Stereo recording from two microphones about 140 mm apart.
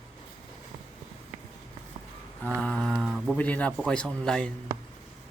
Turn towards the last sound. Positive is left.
turn(degrees=5)  # may be behind; listen again after turning